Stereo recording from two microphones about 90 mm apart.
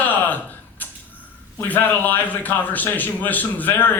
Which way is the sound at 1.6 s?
20° left (ahead or behind).